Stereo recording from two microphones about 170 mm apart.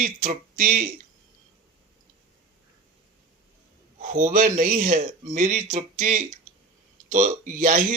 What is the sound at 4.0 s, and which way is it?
A man's voice, 50° right (ahead or behind).